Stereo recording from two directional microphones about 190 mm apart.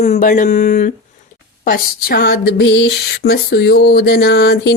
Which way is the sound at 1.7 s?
55° left (ahead or behind).